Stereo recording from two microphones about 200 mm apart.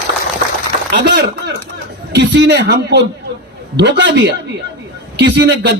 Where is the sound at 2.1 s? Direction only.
60° right (ahead or behind).